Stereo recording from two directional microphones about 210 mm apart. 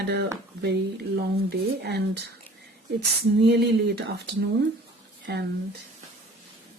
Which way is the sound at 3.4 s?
55° right (ahead or behind).